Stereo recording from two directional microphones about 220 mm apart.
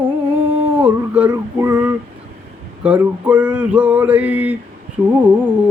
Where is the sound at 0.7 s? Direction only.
5° right (ahead or behind).